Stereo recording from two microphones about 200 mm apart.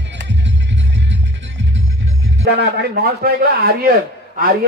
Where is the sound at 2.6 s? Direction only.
50° right (ahead or behind).